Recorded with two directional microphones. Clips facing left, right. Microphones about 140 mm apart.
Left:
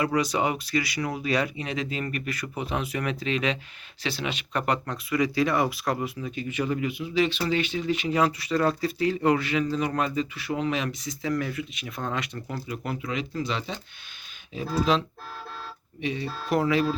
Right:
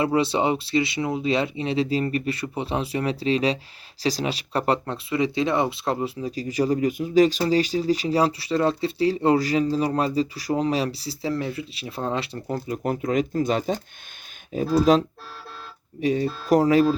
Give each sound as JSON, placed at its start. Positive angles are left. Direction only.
{"t": 0.0, "sound": "speech", "side_deg": -30}